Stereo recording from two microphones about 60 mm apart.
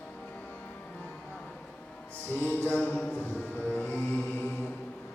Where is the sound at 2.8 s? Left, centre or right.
Left.